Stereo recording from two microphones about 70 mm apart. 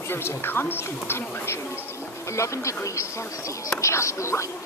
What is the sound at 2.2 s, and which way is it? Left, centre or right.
Speech, left.